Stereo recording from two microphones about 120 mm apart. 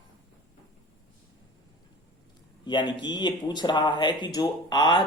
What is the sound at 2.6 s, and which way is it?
Speech, 40° left (ahead or behind).